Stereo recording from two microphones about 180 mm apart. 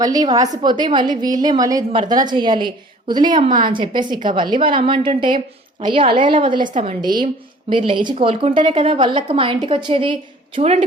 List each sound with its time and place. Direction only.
0.0 s a woman's voice: 20° right (ahead or behind)